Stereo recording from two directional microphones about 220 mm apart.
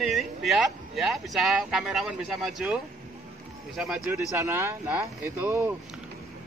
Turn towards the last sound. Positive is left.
turn(degrees=-10)  # may be behind; listen again after turning